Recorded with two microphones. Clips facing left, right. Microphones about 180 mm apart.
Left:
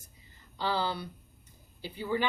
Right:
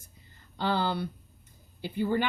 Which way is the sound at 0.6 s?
55° right (ahead or behind).